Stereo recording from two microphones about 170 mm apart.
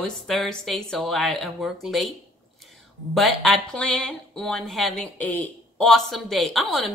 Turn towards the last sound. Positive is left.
turn(degrees=0)  # may be behind; listen again after turning